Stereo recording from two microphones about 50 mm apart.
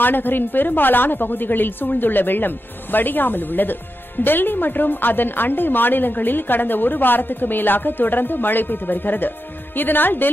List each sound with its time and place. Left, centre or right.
0.0 s a woman's voice: left